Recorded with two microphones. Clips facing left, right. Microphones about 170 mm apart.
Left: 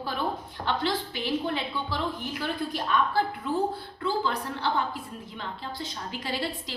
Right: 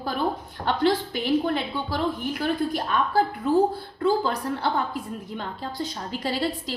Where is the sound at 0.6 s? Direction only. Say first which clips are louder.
Right 6 dB; 50° right (ahead or behind).